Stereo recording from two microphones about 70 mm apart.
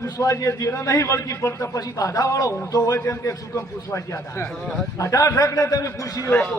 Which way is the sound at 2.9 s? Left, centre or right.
Left.